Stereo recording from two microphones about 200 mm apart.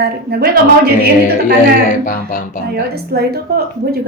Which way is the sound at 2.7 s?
50° right (ahead or behind).